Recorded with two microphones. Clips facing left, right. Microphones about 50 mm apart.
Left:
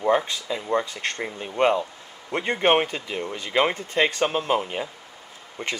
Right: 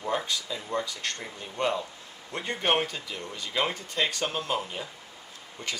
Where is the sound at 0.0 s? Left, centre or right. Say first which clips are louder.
Left 8 dB; left.